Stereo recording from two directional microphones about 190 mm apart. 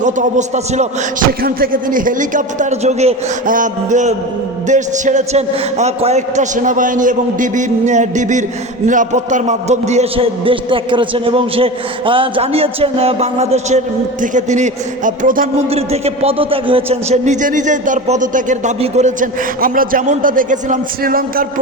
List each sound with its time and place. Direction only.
0.0 s a man's voice: 40° right (ahead or behind)
1.3 s a man's voice: 50° right (ahead or behind)
15.7 s a man's voice: 30° right (ahead or behind); by 21.4 s 50° right (ahead or behind)